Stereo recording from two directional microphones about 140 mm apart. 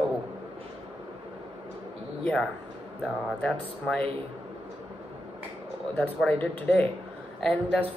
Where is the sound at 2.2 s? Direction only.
5° left (ahead or behind).